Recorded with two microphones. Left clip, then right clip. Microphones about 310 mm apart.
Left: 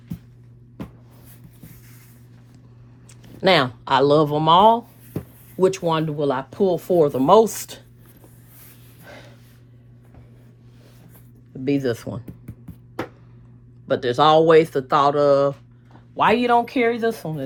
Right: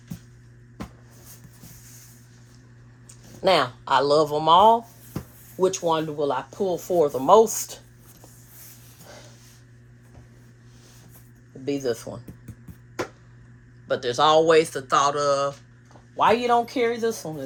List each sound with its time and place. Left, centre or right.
3.4 s speech: left
11.6 s speech: left
13.8 s speech: left
16.1 s speech: left